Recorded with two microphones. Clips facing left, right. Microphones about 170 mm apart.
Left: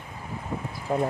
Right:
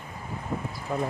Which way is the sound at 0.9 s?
30° left (ahead or behind).